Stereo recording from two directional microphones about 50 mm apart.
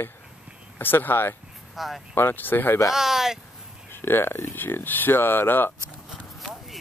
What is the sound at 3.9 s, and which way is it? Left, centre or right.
Speech, left.